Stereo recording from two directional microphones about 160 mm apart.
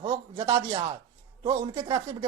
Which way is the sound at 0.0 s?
20° right (ahead or behind).